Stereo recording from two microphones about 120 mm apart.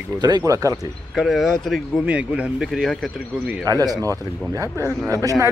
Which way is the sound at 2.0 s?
10° right (ahead or behind).